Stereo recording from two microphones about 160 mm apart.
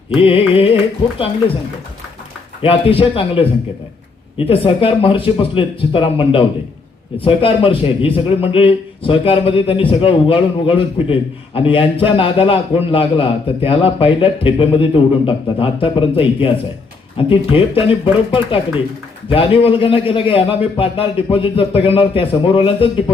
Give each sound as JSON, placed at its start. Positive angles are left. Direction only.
{"t": 0.2, "sound": "a man's voice", "side_deg": 35}
{"t": 2.6, "sound": "a man's voice", "side_deg": 35}